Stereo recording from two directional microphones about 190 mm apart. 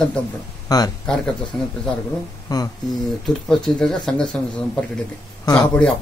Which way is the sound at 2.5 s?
20° left (ahead or behind).